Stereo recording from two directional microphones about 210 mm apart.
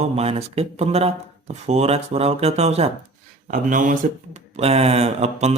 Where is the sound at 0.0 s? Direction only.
30° right (ahead or behind).